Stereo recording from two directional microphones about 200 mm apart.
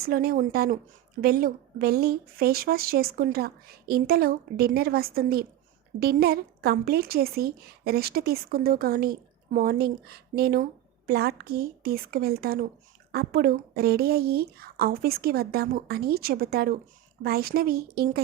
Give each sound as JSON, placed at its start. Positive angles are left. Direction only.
{"t": 0.0, "sound": "a woman's voice", "side_deg": -50}